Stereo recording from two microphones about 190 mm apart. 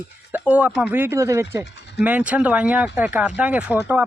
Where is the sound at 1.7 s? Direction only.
65° left (ahead or behind).